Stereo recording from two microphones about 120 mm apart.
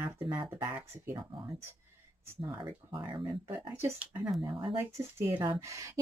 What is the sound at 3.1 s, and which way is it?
Speech, 40° right (ahead or behind).